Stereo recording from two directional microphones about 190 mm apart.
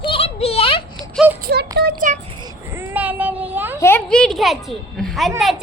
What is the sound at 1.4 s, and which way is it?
Speech, 60° right (ahead or behind).